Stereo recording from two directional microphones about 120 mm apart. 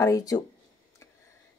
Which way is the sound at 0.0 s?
30° left (ahead or behind).